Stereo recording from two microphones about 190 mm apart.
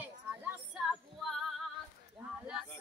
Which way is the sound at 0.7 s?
Centre (ahead or behind).